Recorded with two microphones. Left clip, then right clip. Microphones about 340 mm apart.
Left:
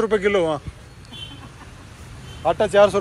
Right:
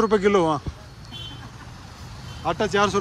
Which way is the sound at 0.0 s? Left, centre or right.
Centre.